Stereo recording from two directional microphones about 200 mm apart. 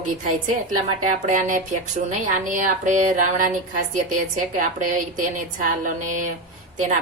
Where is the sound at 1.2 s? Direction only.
40° right (ahead or behind).